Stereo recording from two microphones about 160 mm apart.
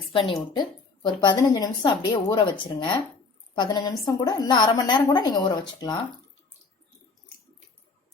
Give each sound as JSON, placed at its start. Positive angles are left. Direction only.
{"t": 0.1, "sound": "a woman's voice", "side_deg": 35}